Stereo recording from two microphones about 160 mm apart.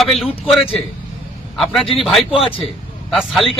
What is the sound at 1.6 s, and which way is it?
A man's voice, centre (ahead or behind).